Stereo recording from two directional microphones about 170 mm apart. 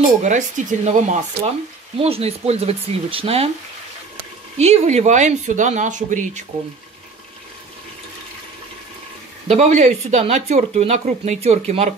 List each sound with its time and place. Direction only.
0.2 s speech: 45° right (ahead or behind)
4.6 s speech: 40° right (ahead or behind)
9.5 s speech: 40° right (ahead or behind)